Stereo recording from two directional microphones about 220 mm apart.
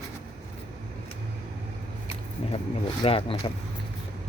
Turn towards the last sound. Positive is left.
turn(degrees=25)  # may be behind; listen again after turning